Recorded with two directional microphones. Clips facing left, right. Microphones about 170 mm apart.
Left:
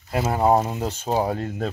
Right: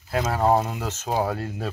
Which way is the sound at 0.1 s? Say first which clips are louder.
Left 2 dB; 5° left (ahead or behind).